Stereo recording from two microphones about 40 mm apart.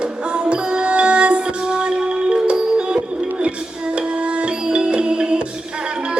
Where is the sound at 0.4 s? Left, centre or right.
Right.